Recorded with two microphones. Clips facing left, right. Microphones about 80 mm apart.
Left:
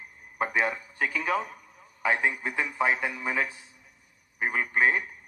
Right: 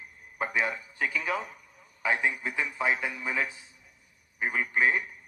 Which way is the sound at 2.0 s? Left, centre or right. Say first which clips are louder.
Left 2 dB; left.